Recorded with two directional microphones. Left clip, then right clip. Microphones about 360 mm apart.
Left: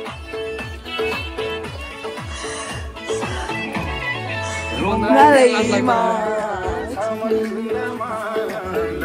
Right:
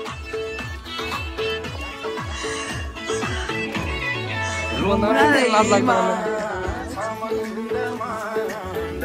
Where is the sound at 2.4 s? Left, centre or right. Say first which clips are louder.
Left 2 dB; centre.